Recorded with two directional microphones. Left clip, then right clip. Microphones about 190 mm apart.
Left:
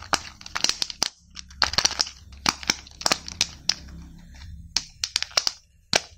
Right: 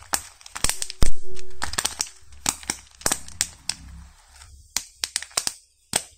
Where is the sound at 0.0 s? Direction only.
15° left (ahead or behind).